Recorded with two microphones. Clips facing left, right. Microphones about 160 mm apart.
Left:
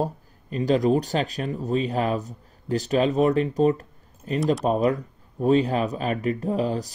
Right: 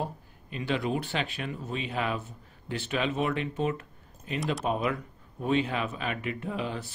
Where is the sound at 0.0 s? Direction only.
40° left (ahead or behind).